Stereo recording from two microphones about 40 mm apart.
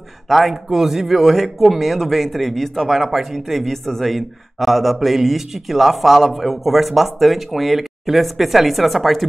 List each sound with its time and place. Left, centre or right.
0.3 s speech: centre